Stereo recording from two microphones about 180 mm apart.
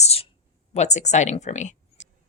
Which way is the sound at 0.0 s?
35° left (ahead or behind).